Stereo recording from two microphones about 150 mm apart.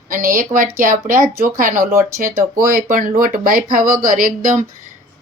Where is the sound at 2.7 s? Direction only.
75° right (ahead or behind).